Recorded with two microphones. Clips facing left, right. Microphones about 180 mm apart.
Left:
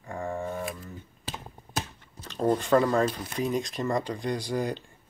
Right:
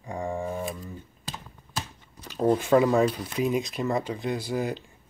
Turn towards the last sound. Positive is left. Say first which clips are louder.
# right 1 dB
turn(degrees=-5)  # may be behind; listen again after turning